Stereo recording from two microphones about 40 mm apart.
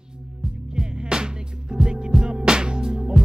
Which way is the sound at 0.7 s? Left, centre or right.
Centre.